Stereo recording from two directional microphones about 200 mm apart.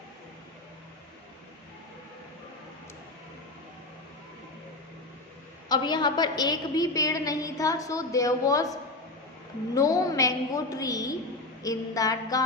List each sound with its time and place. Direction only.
5.6 s a woman's voice: 20° left (ahead or behind)
9.7 s a woman's voice: 15° left (ahead or behind)